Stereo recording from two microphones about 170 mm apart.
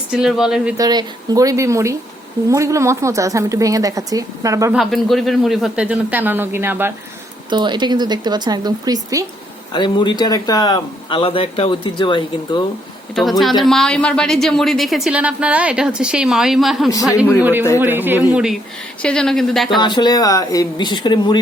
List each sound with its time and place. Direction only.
0.1 s a woman's voice: 5° right (ahead or behind)
0.8 s speech: 25° right (ahead or behind)
4.7 s speech: centre (ahead or behind)
7.5 s speech: 25° right (ahead or behind)
9.7 s speech: 25° left (ahead or behind)
13.4 s a woman's voice: centre (ahead or behind)
19.0 s a woman's voice: 5° left (ahead or behind)
19.8 s speech: 25° left (ahead or behind)